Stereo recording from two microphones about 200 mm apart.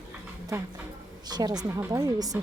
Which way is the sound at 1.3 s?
20° right (ahead or behind).